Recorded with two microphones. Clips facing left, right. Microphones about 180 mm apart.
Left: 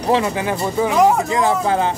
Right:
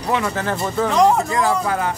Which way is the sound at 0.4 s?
10° left (ahead or behind).